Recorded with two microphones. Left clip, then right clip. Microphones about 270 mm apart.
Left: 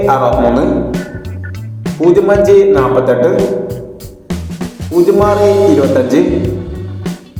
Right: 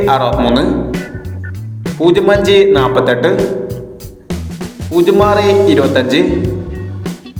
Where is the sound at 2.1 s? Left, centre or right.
Right.